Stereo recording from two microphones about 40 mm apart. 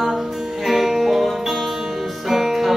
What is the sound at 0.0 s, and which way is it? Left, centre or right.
Music, centre.